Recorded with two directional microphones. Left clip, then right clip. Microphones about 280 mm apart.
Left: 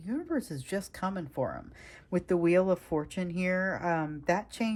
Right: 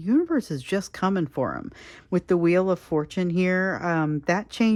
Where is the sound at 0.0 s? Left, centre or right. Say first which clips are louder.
Right 12 dB; centre.